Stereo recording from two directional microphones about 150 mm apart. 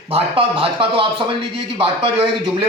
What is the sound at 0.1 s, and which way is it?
Speech, 40° right (ahead or behind).